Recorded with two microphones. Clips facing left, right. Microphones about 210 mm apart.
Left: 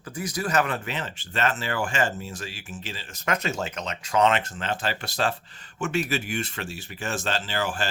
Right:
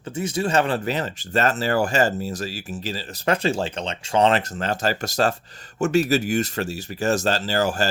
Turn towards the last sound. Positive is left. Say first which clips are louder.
# right 6 dB
turn(degrees=-40)  # may be behind; listen again after turning